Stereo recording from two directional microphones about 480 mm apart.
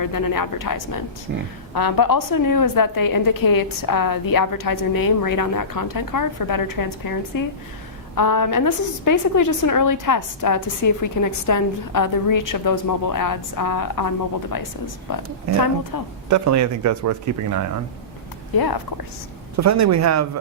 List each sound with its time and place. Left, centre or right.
0.0 s a woman's voice: left
1.3 s speech: right
1.7 s a woman's voice: left
16.3 s speech: right
18.5 s a woman's voice: left
19.5 s speech: right